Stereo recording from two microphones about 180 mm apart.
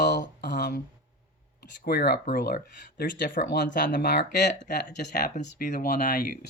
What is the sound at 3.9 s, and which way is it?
Speech, 70° left (ahead or behind).